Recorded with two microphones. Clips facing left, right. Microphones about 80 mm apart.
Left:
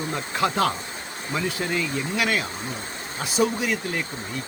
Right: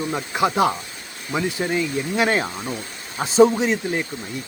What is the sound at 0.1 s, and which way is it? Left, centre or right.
Speech, centre.